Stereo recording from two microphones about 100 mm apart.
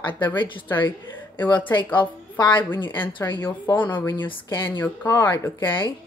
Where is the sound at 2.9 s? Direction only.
20° left (ahead or behind).